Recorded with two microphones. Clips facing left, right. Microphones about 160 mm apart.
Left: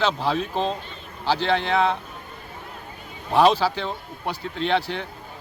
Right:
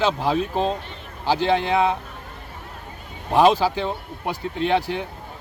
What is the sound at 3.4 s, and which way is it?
A man's voice, 15° right (ahead or behind).